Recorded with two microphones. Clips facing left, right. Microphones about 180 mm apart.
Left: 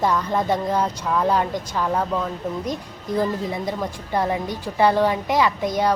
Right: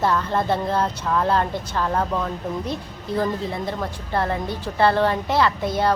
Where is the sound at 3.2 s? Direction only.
15° left (ahead or behind).